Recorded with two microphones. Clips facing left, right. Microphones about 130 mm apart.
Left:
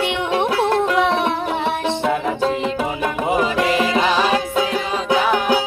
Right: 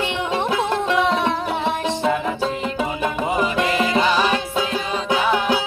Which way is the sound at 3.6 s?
5° left (ahead or behind).